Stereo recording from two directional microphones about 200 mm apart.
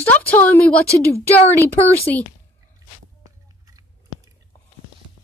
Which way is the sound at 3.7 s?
20° right (ahead or behind).